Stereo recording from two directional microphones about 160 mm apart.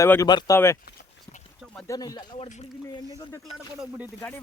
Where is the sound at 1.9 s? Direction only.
25° left (ahead or behind).